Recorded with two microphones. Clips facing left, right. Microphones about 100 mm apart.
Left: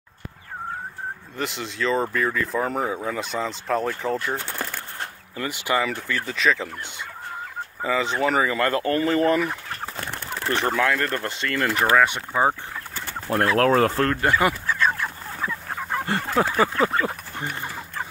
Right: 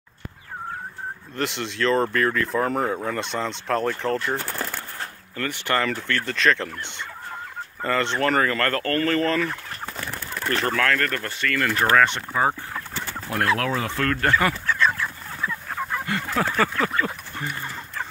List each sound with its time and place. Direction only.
1.3 s speech: centre (ahead or behind)
7.8 s speech: 5° left (ahead or behind); by 11.8 s 25° left (ahead or behind)
11.8 s speech: 10° left (ahead or behind)
12.9 s chicken: 35° left (ahead or behind)
13.7 s speech: 45° left (ahead or behind)
14.0 s speech: 15° left (ahead or behind)
14.9 s fowl: 25° left (ahead or behind)
16.4 s speech: 20° left (ahead or behind)